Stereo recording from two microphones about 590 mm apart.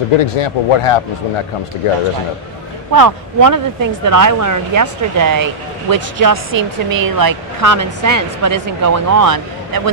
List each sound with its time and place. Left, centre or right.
0.2 s speech: left
2.9 s speech: right
6.5 s speech: centre
7.2 s speech: right